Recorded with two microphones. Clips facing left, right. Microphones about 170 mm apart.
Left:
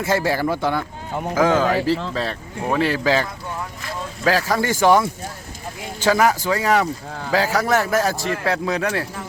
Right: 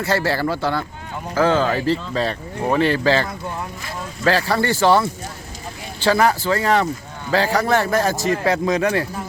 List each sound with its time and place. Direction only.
0.1 s a man's voice: 15° left (ahead or behind)
6.1 s a man's voice: 10° left (ahead or behind)